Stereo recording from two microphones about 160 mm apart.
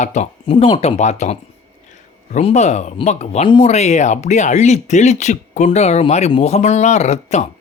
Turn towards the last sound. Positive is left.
turn(degrees=45)  # may be behind; listen again after turning